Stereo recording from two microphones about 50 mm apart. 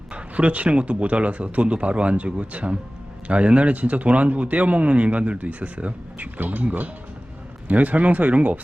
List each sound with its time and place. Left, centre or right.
0.1 s speech: right